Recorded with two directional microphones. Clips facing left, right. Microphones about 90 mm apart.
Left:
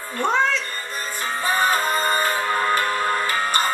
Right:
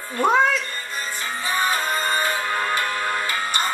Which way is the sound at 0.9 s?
45° left (ahead or behind).